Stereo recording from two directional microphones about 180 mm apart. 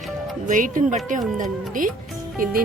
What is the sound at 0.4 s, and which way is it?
Speech, 45° right (ahead or behind).